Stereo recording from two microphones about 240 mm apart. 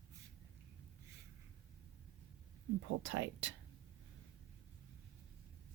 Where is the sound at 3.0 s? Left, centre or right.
Right.